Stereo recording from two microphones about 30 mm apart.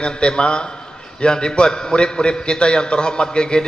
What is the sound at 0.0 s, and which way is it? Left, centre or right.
A man's voice, left.